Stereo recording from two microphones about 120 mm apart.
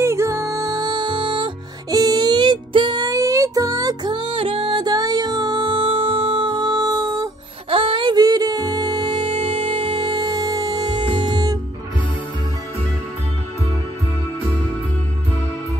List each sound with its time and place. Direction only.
0.0 s music: 25° right (ahead or behind)
7.7 s music: 45° right (ahead or behind)